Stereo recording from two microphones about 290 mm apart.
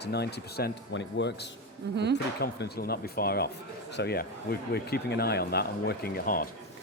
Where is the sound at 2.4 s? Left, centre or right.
Left.